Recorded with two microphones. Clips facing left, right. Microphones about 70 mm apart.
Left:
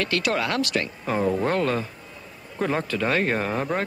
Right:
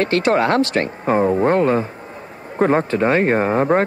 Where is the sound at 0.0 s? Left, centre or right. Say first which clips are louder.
Right 8 dB; right.